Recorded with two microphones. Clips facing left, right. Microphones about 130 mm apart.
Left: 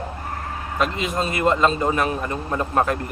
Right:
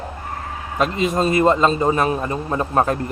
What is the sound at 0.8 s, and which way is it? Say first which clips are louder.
A man's voice: right 5 dB; 40° right (ahead or behind).